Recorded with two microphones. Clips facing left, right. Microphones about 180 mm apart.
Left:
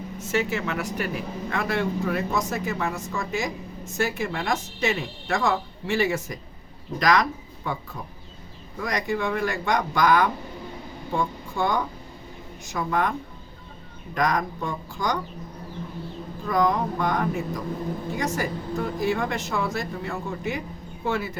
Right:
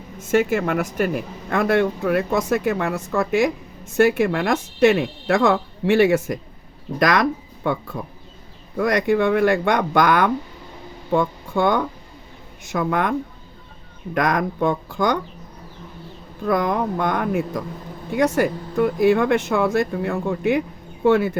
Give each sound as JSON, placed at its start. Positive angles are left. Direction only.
{"t": 0.3, "sound": "speech", "side_deg": -50}
{"t": 8.8, "sound": "speech", "side_deg": -60}
{"t": 16.5, "sound": "speech", "side_deg": -60}